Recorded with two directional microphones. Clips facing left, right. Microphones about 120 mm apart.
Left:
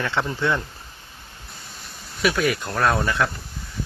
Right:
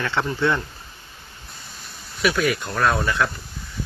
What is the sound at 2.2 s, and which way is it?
Speech, 30° left (ahead or behind).